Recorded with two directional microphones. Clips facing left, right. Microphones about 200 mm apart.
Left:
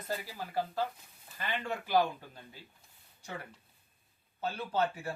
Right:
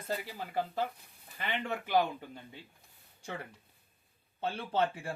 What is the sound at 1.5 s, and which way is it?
Speech, 20° right (ahead or behind).